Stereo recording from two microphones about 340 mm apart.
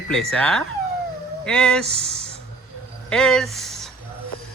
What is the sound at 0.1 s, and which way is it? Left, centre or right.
Speech, centre.